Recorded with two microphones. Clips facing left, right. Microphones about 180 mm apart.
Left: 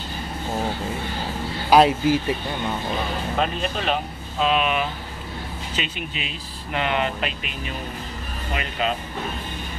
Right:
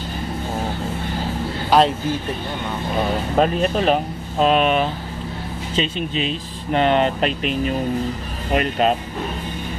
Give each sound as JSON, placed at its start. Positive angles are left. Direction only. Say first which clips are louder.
{"t": 1.7, "sound": "speech", "louder": "left 1 dB", "side_deg": 10}
{"t": 3.3, "sound": "speech", "louder": "right 8 dB", "side_deg": -45}
{"t": 6.1, "sound": "speech", "louder": "right 10 dB", "side_deg": -35}